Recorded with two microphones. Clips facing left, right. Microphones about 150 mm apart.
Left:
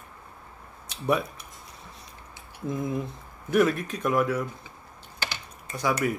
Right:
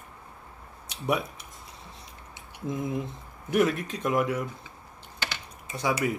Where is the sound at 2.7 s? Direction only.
20° right (ahead or behind).